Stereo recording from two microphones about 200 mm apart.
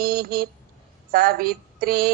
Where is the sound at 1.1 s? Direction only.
50° right (ahead or behind).